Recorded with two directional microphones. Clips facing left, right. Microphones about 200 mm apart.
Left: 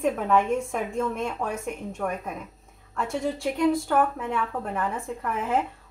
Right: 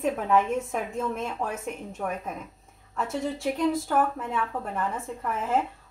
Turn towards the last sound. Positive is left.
turn(degrees=0)  # may be behind; listen again after turning